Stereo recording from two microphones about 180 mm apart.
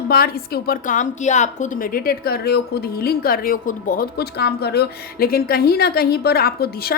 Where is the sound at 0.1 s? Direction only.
55° left (ahead or behind).